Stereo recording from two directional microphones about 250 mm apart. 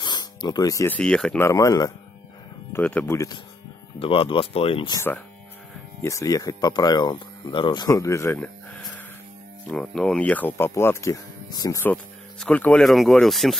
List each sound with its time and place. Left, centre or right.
0.0 s speech: centre